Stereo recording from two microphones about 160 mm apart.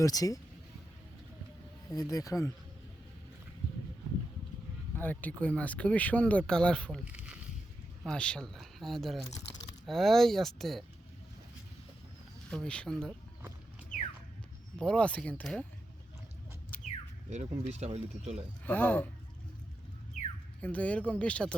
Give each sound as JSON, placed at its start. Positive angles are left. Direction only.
{"t": 0.0, "sound": "speech", "side_deg": 20}
{"t": 1.9, "sound": "speech", "side_deg": 20}
{"t": 4.9, "sound": "speech", "side_deg": 10}
{"t": 7.0, "sound": "a sound", "side_deg": -10}
{"t": 8.0, "sound": "speech", "side_deg": 5}
{"t": 12.5, "sound": "speech", "side_deg": 5}
{"t": 14.8, "sound": "speech", "side_deg": 5}
{"t": 17.2, "sound": "speech", "side_deg": -45}
{"t": 18.6, "sound": "speech", "side_deg": 10}
{"t": 20.6, "sound": "speech", "side_deg": 10}